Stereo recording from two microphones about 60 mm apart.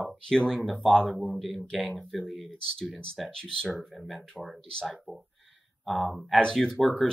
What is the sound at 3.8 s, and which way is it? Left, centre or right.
Speech, centre.